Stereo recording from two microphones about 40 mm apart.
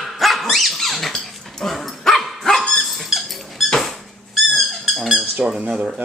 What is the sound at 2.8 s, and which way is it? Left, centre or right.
Squeak, centre.